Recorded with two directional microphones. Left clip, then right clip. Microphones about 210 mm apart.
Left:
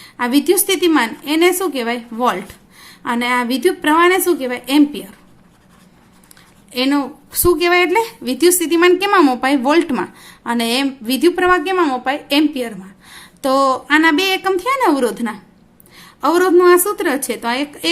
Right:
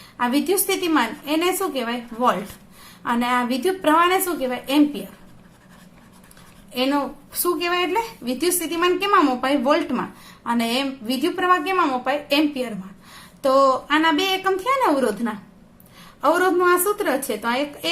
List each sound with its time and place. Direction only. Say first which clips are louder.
0.2 s a woman's voice: left 5 dB; 40° left (ahead or behind)
6.7 s a woman's voice: left 4 dB; 40° left (ahead or behind)